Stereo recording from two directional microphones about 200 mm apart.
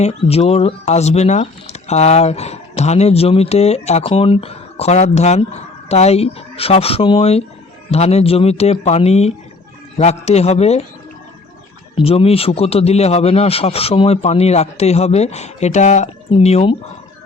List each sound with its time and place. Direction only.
0.0 s speech: 30° left (ahead or behind)
11.9 s speech: 30° left (ahead or behind)